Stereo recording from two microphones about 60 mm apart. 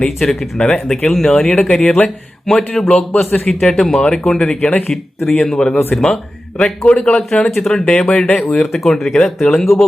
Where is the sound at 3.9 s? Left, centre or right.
Centre.